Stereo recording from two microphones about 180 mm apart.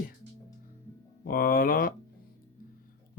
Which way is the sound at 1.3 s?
55° left (ahead or behind).